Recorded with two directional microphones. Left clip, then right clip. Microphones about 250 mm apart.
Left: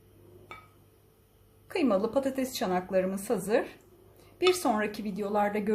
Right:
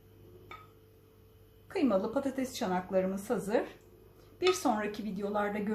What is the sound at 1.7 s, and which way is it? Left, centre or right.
A woman's voice, left.